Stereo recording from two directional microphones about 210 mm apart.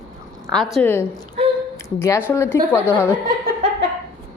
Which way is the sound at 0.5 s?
Centre (ahead or behind).